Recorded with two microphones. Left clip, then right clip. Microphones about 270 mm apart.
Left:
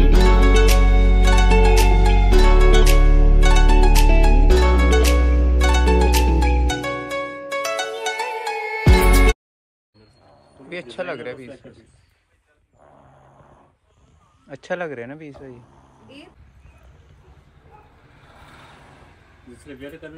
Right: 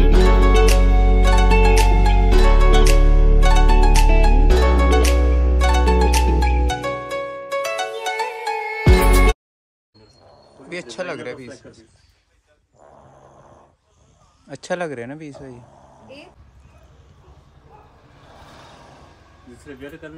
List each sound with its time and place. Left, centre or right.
0.0 s music: centre
10.7 s a sound: centre
14.5 s speech: centre
18.2 s vehicle: right
19.6 s speech: centre